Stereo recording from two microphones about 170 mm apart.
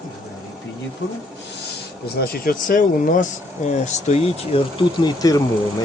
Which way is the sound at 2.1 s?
65° left (ahead or behind).